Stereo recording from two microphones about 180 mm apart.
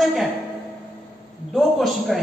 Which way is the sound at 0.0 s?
Centre (ahead or behind).